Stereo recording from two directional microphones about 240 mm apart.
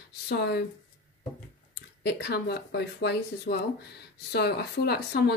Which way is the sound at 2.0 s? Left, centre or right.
Left.